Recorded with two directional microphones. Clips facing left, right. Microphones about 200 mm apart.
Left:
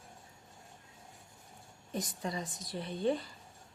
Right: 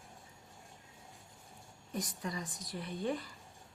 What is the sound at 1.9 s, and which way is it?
A woman's voice, 25° left (ahead or behind).